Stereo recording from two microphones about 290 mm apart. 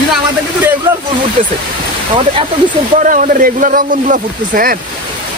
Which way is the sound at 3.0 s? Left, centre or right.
Right.